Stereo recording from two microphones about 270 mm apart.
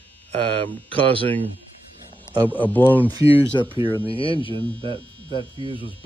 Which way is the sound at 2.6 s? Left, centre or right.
Centre.